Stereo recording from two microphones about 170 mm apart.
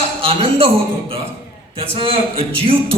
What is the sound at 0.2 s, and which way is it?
A man's voice, 35° right (ahead or behind).